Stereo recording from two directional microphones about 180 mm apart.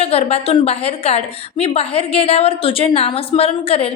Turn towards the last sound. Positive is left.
turn(degrees=35)  # may be behind; listen again after turning